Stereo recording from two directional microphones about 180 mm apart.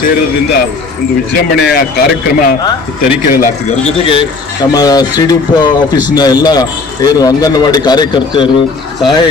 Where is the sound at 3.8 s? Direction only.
30° left (ahead or behind).